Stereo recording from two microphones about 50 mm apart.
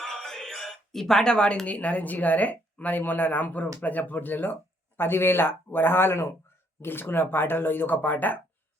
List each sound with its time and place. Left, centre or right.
0.0 s music: centre
1.6 s speech: left